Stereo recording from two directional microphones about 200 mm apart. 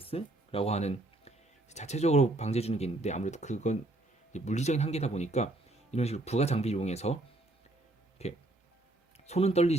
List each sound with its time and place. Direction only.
0.0 s a sound: 30° left (ahead or behind)
1.7 s speech: 35° left (ahead or behind)
8.2 s speech: 30° left (ahead or behind)